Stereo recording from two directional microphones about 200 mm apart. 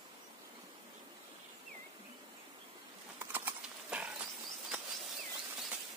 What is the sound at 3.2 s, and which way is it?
Clip-clop, 10° right (ahead or behind).